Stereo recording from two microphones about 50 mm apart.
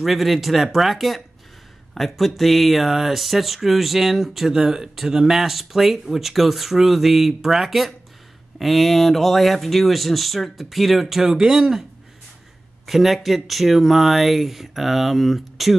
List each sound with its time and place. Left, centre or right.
0.0 s speech: centre
12.8 s speech: centre